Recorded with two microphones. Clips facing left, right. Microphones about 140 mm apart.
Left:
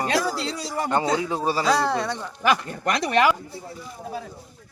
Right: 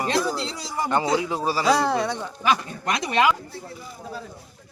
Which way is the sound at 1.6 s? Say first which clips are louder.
Right 3 dB; centre (ahead or behind).